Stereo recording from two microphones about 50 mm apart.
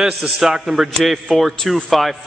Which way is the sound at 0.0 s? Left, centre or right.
Centre.